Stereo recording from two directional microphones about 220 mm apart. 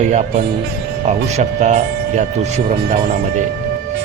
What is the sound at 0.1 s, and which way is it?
Speech, 30° right (ahead or behind).